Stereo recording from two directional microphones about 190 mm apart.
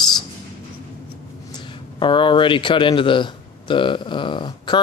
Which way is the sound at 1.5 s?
25° left (ahead or behind).